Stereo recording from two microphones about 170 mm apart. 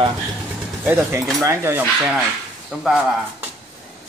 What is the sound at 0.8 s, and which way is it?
Speech, 15° right (ahead or behind).